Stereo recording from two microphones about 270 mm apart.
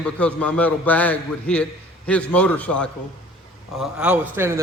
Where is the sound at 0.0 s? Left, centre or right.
Centre.